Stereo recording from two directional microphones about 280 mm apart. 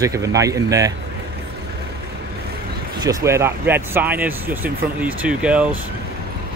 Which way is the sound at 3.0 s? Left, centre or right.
Centre.